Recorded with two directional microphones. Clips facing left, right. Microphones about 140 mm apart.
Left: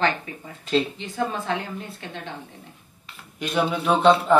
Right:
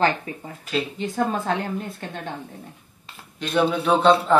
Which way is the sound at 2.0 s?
45° right (ahead or behind).